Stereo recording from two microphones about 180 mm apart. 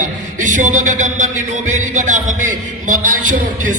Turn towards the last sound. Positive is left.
turn(degrees=-50)  # may be behind; listen again after turning